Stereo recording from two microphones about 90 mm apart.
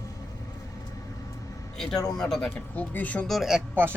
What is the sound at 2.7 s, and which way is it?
Speech, 15° left (ahead or behind).